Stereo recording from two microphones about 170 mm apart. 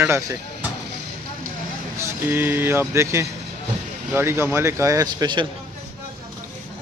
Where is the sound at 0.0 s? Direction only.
15° right (ahead or behind).